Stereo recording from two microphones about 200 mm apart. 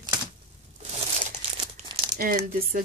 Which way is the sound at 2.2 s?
45° right (ahead or behind).